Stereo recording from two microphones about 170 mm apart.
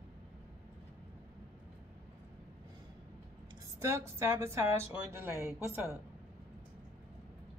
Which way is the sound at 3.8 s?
15° right (ahead or behind).